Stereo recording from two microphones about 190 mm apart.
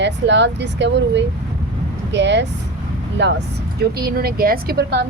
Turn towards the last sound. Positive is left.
turn(degrees=-55)  # may be behind; listen again after turning